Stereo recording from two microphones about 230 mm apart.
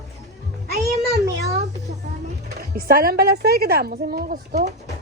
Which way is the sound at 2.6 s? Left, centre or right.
Right.